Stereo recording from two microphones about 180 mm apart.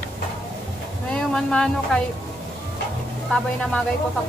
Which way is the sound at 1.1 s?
5° left (ahead or behind).